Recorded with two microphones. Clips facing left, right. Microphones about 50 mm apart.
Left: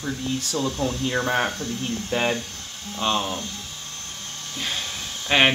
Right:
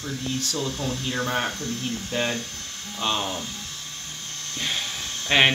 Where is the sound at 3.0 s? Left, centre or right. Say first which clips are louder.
Left 2 dB; centre.